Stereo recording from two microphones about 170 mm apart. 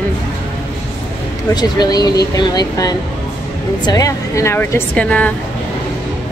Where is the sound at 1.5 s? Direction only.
25° left (ahead or behind).